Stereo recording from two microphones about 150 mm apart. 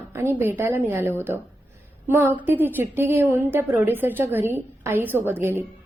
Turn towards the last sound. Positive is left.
turn(degrees=-15)  # may be behind; listen again after turning